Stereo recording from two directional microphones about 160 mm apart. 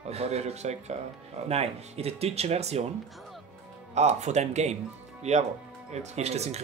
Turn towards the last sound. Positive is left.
turn(degrees=-40)  # may be behind; listen again after turning